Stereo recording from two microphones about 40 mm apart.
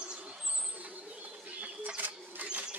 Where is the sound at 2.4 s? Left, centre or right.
Right.